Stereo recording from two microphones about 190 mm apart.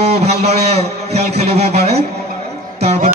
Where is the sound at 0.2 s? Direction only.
35° right (ahead or behind).